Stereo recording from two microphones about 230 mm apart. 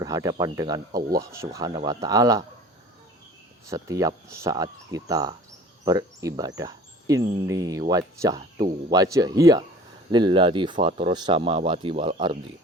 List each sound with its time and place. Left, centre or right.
0.0 s speech: centre
3.7 s speech: centre